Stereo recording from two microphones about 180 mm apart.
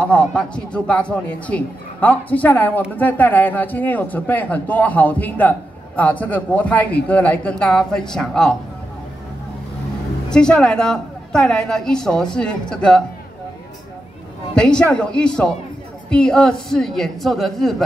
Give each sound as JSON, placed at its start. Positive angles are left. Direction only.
{"t": 0.0, "sound": "a man's voice", "side_deg": 5}
{"t": 10.3, "sound": "a woman's voice", "side_deg": 5}
{"t": 14.5, "sound": "a woman's voice", "side_deg": 5}